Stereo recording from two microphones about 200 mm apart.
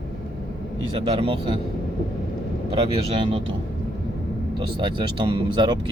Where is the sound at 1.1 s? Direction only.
25° right (ahead or behind).